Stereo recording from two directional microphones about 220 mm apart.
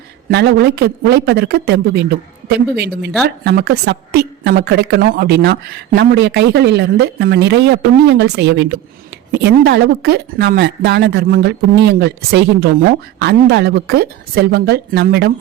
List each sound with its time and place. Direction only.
0.3 s speech: 50° right (ahead or behind)